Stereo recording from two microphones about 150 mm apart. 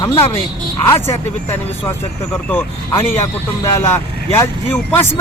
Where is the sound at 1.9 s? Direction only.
15° left (ahead or behind).